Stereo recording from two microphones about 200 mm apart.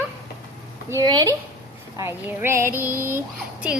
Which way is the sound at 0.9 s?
20° right (ahead or behind).